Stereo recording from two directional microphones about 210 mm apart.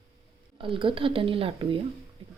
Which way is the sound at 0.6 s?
25° right (ahead or behind).